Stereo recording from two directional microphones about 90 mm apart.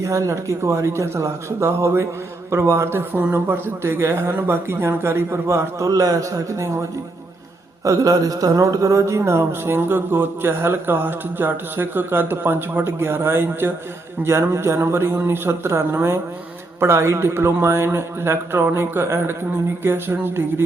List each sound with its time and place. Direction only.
0.0 s a man's voice: 35° right (ahead or behind)
7.9 s a man's voice: 40° right (ahead or behind)